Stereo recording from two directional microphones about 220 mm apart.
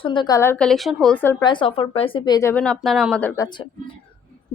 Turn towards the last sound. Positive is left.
turn(degrees=20)  # may be behind; listen again after turning